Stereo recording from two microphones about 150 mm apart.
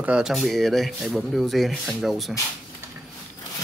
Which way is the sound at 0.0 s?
5° right (ahead or behind).